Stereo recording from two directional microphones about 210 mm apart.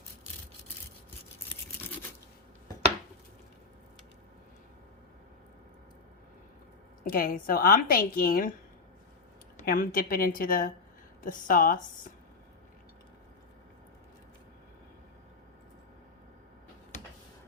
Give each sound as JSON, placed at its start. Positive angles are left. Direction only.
{"t": 1.5, "sound": "toothbrush", "side_deg": 10}
{"t": 7.0, "sound": "a woman's voice", "side_deg": 40}
{"t": 9.6, "sound": "a woman's voice", "side_deg": 45}